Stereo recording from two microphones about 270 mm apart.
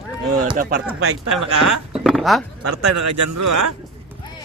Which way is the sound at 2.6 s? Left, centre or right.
Right.